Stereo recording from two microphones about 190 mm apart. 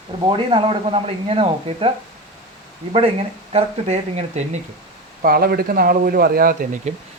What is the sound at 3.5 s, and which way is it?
A man's voice, 35° right (ahead or behind).